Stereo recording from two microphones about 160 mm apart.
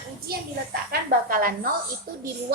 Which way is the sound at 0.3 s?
75° right (ahead or behind).